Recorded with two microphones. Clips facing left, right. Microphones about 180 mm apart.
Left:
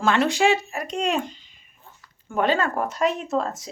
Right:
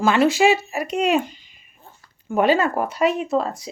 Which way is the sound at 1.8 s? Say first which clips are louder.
Right 3 dB; 30° right (ahead or behind).